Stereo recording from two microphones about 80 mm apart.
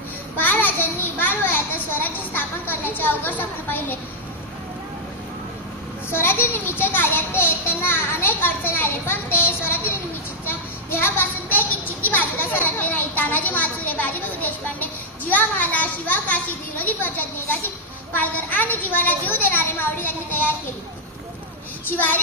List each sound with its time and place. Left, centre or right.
0.4 s a sound: left
6.1 s a child's voice: left
21.8 s a child's voice: left